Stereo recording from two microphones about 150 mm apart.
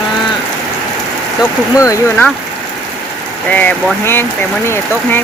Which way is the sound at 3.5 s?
10° left (ahead or behind).